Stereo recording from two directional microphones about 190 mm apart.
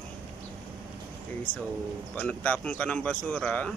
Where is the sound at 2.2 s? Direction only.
10° left (ahead or behind).